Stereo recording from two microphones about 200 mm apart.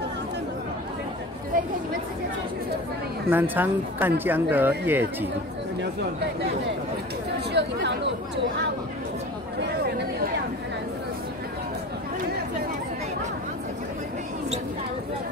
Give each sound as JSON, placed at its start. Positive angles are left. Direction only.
{"t": 3.3, "sound": "speech", "side_deg": -10}
{"t": 7.3, "sound": "chatter", "side_deg": -60}